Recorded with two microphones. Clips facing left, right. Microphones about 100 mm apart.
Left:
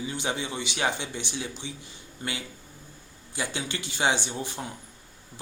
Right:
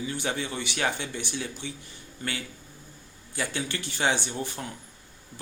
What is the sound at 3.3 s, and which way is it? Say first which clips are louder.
Speech: right 1 dB; 15° left (ahead or behind).